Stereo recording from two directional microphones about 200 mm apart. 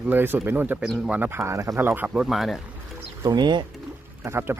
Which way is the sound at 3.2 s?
20° right (ahead or behind).